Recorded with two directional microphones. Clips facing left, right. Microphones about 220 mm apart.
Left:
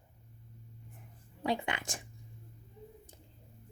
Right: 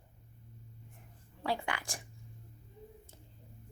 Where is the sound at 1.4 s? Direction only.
15° left (ahead or behind).